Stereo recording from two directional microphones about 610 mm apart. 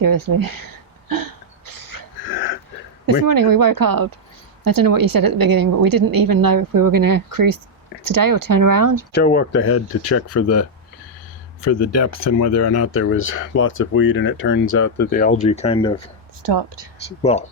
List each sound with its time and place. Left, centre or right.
0.0 s a sound: right
2.2 s a sound: centre
3.1 s a woman's voice: right
9.1 s speech: centre
16.4 s a woman's voice: right
17.1 s speech: centre